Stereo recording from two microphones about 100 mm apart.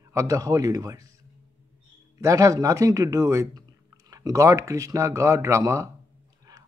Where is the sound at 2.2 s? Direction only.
35° right (ahead or behind).